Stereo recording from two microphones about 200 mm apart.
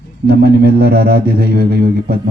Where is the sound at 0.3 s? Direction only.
50° right (ahead or behind).